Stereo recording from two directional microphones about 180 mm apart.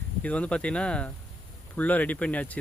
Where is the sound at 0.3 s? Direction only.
5° left (ahead or behind).